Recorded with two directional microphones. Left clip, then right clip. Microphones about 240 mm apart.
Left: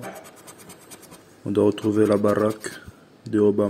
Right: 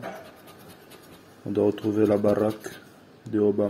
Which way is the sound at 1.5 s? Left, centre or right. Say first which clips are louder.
Left 3 dB; left.